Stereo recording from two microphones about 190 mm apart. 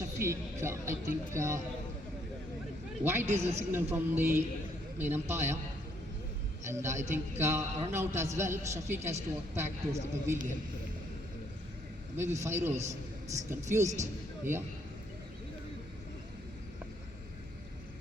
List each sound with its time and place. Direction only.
0.2 s speech: 15° right (ahead or behind)
3.0 s speech: 10° right (ahead or behind)
6.7 s speech: 15° right (ahead or behind)
12.1 s a man's voice: 15° right (ahead or behind)